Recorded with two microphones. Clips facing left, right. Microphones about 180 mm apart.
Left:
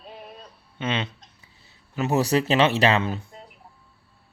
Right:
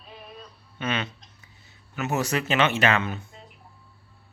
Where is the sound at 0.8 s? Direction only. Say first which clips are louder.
Left 1 dB; 25° left (ahead or behind).